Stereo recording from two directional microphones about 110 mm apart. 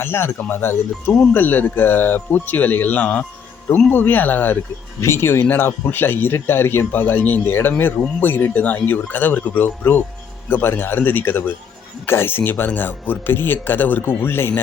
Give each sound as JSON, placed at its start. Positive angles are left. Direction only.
{"t": 0.0, "sound": "speech", "side_deg": 20}